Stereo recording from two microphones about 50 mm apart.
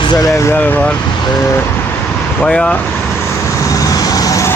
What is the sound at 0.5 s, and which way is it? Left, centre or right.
Speech, left.